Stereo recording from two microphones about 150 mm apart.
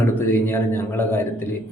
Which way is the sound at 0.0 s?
15° left (ahead or behind).